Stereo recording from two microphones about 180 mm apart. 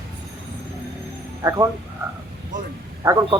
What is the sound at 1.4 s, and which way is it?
Speech, 20° right (ahead or behind).